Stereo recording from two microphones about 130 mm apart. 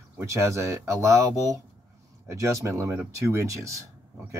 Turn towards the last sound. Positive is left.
turn(degrees=-25)  # may be behind; listen again after turning